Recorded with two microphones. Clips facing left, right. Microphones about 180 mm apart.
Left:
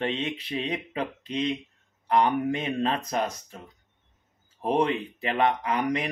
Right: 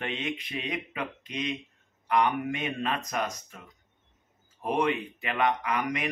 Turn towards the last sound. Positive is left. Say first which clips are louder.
# left 3 dB
turn(degrees=30)  # may be behind; listen again after turning